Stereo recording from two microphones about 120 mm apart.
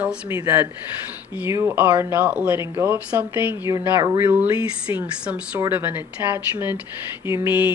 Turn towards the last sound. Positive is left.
turn(degrees=-15)  # may be behind; listen again after turning